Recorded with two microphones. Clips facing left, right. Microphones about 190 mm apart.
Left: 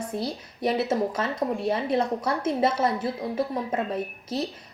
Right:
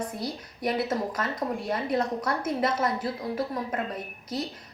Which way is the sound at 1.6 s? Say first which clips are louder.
Left 3 dB; 25° left (ahead or behind).